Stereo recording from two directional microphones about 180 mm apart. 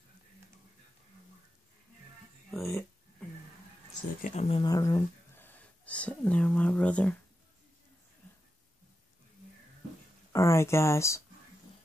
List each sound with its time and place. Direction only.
2.5 s a sound: centre (ahead or behind)
4.2 s speech: 35° left (ahead or behind); by 7.2 s 5° left (ahead or behind)
10.3 s speech: 15° left (ahead or behind)